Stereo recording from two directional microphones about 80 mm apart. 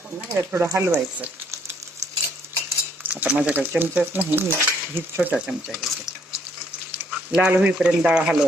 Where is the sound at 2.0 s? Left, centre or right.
Right.